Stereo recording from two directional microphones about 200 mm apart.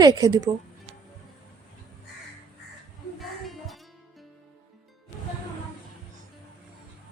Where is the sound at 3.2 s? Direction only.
Centre (ahead or behind).